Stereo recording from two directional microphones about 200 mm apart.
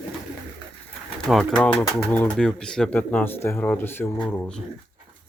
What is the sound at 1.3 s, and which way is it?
Speech, centre (ahead or behind).